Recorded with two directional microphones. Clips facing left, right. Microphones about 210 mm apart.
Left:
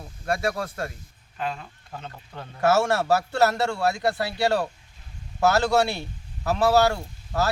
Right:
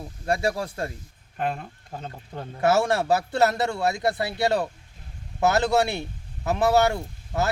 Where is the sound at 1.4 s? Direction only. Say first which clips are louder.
Right 3 dB; 50° right (ahead or behind).